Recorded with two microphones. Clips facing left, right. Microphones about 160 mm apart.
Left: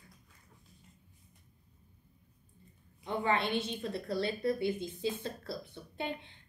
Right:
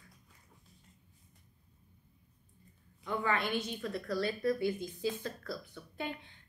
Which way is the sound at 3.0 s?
25° left (ahead or behind).